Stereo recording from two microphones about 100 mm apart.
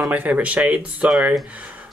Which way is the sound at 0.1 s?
15° right (ahead or behind).